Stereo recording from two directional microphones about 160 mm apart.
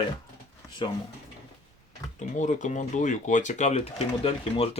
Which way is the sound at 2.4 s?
50° left (ahead or behind).